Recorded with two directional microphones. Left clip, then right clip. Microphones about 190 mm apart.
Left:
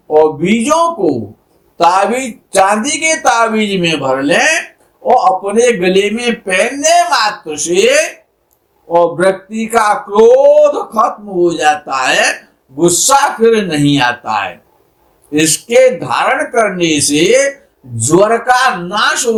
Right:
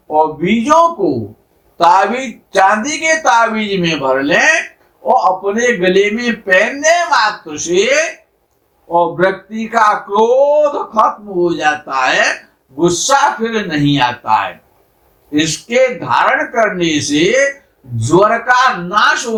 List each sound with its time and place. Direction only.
0.1 s speech: 45° left (ahead or behind)